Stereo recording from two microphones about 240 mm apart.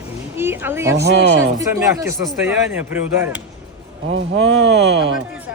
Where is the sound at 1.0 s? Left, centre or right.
Right.